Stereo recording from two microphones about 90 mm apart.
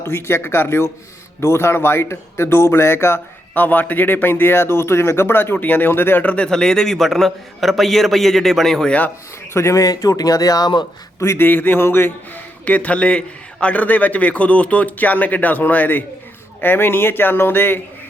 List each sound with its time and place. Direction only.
0.0 s speech: 30° left (ahead or behind); by 9.0 s 10° left (ahead or behind)
9.5 s speech: 30° left (ahead or behind)
11.4 s a man's voice: 20° left (ahead or behind)